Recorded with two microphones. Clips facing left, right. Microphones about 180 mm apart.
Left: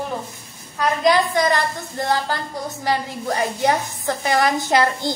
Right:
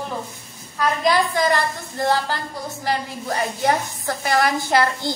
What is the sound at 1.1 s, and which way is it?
Speech, 20° left (ahead or behind).